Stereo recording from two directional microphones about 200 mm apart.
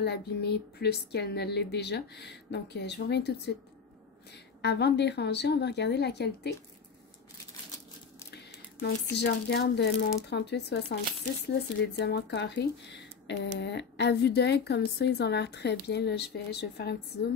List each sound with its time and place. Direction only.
0.0 s speech: 55° left (ahead or behind)
4.6 s speech: 55° left (ahead or behind)
8.3 s a sound: 50° left (ahead or behind)
9.1 s speech: 55° left (ahead or behind)